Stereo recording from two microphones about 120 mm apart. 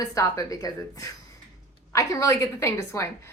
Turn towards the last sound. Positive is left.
turn(degrees=25)  # may be behind; listen again after turning